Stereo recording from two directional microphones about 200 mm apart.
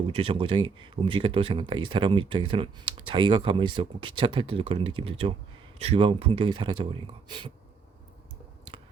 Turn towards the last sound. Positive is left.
turn(degrees=-25)  # may be behind; listen again after turning